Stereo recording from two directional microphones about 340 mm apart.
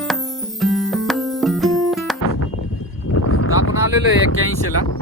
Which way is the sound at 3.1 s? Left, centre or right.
Left.